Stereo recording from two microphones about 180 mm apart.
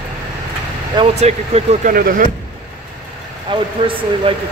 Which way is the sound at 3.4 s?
30° right (ahead or behind).